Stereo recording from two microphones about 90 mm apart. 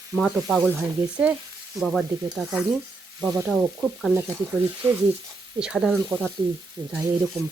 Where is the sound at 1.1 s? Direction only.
15° right (ahead or behind).